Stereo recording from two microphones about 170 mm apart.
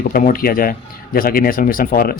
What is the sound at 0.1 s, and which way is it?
A man's voice, 55° left (ahead or behind).